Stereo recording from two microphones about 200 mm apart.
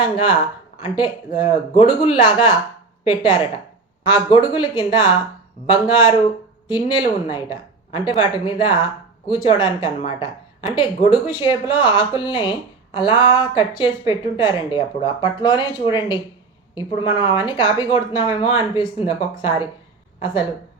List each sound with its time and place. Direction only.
0.0 s a woman's voice: 25° left (ahead or behind)